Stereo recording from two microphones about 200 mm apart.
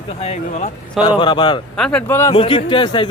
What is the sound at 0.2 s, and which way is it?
Speech, 35° left (ahead or behind).